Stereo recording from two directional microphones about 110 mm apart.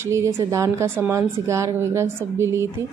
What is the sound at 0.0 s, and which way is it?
A woman's voice, 25° right (ahead or behind).